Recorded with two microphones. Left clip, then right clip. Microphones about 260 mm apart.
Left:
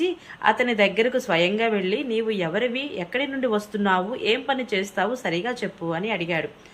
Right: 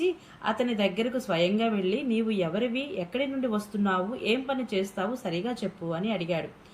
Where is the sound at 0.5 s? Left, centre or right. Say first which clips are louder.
Left 5 dB; left.